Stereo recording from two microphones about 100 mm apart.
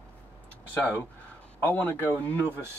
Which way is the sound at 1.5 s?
20° left (ahead or behind).